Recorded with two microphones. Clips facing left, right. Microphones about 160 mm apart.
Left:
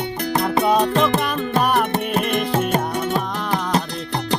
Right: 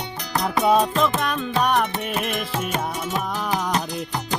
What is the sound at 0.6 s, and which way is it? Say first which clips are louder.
Music: even; centre (ahead or behind).